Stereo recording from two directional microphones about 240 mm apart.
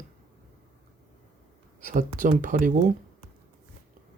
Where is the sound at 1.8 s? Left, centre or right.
Right.